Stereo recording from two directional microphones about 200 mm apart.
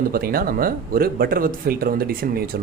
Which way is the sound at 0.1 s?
50° right (ahead or behind).